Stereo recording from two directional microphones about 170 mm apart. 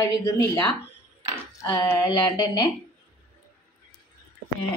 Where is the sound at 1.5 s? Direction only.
15° left (ahead or behind).